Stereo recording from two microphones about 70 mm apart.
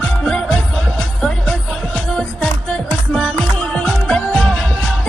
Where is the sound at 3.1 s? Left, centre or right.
Centre.